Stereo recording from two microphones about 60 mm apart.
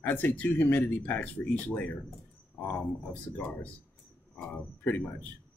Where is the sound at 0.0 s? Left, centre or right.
Left.